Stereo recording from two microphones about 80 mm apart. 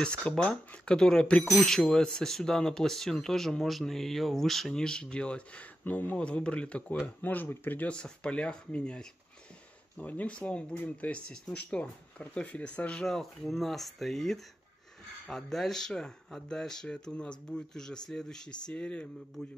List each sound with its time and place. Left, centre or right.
0.0 s speech: centre
13.0 s speech: centre